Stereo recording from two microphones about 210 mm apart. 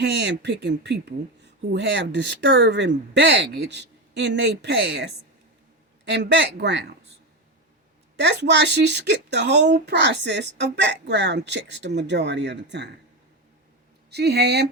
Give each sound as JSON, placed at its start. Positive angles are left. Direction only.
{"t": 0.0, "sound": "speech", "side_deg": -55}
{"t": 8.1, "sound": "speech", "side_deg": -55}
{"t": 14.1, "sound": "speech", "side_deg": -50}